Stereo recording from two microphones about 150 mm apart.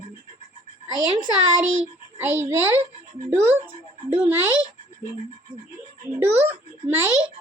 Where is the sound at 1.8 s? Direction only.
15° right (ahead or behind).